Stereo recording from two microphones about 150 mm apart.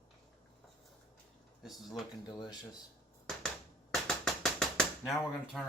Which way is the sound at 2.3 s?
30° left (ahead or behind).